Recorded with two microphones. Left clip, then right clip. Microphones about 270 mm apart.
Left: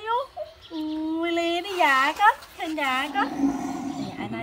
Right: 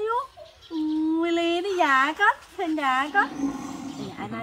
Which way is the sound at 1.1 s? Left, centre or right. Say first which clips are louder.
Left 2 dB; centre.